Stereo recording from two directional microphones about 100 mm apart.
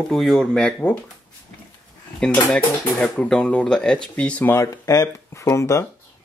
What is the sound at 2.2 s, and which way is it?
Speech, 10° left (ahead or behind).